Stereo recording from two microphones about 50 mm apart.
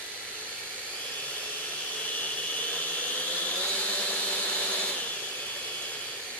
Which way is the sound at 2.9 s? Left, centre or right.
Left.